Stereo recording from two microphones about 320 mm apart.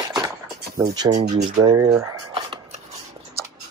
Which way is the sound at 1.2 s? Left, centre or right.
Right.